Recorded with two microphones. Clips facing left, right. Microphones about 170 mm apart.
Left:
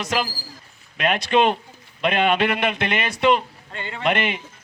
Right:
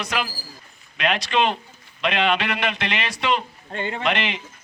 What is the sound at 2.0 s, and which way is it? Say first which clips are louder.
Speech: left 3 dB; 50° left (ahead or behind).